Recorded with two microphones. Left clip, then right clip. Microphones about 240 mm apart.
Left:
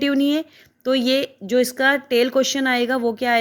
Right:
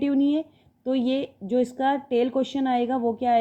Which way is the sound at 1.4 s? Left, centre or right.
Left.